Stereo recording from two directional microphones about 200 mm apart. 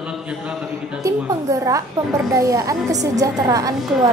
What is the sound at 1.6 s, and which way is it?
A woman's voice, 15° right (ahead or behind).